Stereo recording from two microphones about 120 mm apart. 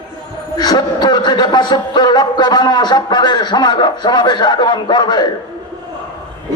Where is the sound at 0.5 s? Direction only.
35° left (ahead or behind).